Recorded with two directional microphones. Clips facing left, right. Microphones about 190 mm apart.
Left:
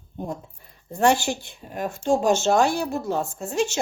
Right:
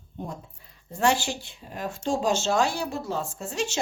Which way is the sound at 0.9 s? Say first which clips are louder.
Left 4 dB; 45° left (ahead or behind).